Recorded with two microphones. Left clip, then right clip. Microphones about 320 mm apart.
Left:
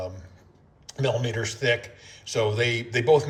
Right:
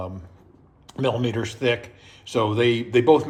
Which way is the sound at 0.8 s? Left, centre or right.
Centre.